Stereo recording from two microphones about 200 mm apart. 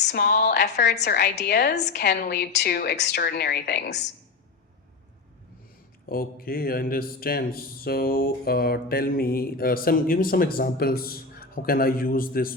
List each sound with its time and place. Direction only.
0.0 s a woman's voice: 55° left (ahead or behind)
6.1 s speech: 45° left (ahead or behind)